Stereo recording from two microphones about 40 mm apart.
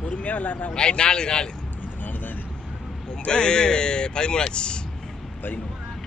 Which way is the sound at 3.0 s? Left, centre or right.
Left.